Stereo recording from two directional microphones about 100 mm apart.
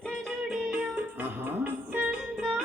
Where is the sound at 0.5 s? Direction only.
5° right (ahead or behind).